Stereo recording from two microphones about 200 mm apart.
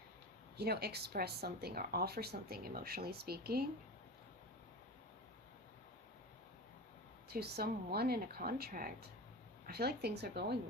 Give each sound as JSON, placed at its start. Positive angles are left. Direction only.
{"t": 0.5, "sound": "speech", "side_deg": -55}
{"t": 7.3, "sound": "speech", "side_deg": -50}